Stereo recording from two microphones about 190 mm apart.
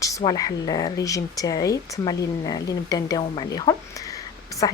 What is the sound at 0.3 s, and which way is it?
Speech, 20° left (ahead or behind).